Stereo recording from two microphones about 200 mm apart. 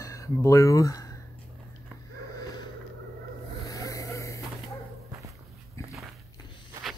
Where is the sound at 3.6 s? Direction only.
20° left (ahead or behind).